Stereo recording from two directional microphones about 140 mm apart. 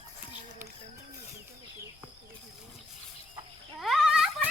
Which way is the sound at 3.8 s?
Centre (ahead or behind).